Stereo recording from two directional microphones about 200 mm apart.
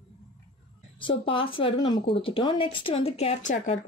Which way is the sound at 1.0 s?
25° left (ahead or behind).